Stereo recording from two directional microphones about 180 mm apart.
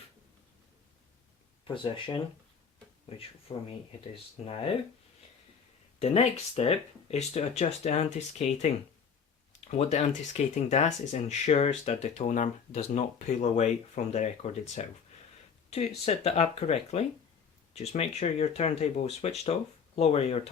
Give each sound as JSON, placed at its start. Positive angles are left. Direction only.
{"t": 1.6, "sound": "speech", "side_deg": 25}
{"t": 3.5, "sound": "speech", "side_deg": 25}
{"t": 6.0, "sound": "speech", "side_deg": 35}
{"t": 16.0, "sound": "speech", "side_deg": 35}